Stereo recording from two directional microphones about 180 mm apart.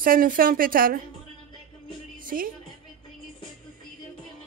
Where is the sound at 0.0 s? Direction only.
50° right (ahead or behind).